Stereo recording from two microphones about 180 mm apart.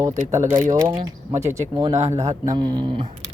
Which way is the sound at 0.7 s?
20° right (ahead or behind).